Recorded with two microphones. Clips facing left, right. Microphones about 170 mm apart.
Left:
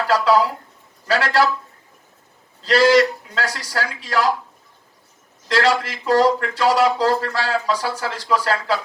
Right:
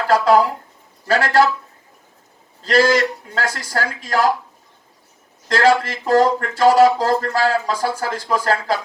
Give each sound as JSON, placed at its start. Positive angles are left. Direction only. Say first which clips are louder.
{"t": 1.0, "sound": "speech", "louder": "right 3 dB", "side_deg": -45}
{"t": 2.6, "sound": "speech", "louder": "left 1 dB", "side_deg": -45}
{"t": 5.5, "sound": "speech", "louder": "right 3 dB", "side_deg": -45}